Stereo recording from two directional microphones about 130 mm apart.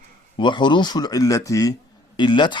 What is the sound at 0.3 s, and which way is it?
Speech, 35° left (ahead or behind).